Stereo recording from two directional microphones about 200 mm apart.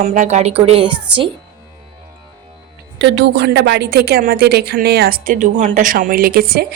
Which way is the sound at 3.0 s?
60° right (ahead or behind).